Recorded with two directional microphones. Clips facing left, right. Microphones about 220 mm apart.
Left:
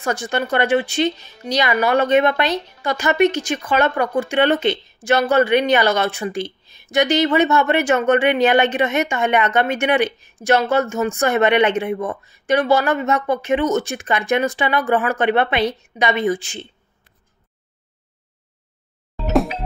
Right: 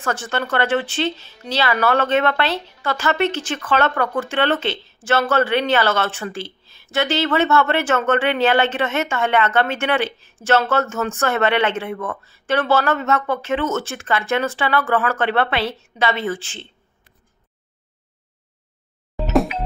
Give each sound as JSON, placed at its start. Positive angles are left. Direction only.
{"t": 0.0, "sound": "speech", "side_deg": 10}